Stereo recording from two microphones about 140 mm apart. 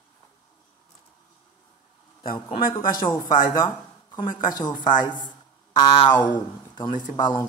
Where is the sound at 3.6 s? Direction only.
35° left (ahead or behind).